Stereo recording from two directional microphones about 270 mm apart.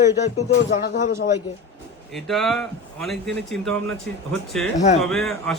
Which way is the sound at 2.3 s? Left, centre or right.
Centre.